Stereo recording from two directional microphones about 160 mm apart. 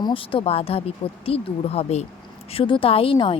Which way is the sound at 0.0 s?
35° left (ahead or behind).